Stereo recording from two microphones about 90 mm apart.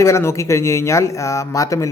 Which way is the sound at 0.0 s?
30° left (ahead or behind).